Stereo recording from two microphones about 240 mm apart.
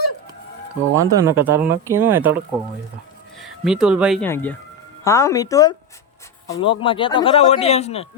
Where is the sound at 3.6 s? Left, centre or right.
Centre.